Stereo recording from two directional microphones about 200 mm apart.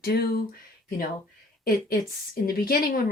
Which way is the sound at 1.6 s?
50° left (ahead or behind).